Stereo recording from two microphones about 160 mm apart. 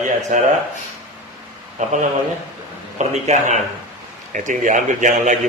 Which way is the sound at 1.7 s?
50° right (ahead or behind).